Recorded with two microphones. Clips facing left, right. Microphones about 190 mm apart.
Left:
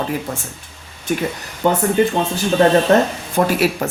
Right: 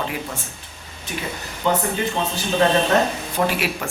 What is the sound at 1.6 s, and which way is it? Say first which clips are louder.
Speech: left 4 dB; 50° left (ahead or behind).